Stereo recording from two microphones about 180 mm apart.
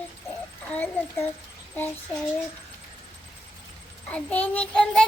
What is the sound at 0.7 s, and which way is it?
Speech, 10° left (ahead or behind).